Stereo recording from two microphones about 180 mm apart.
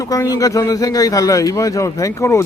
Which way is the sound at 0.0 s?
20° left (ahead or behind).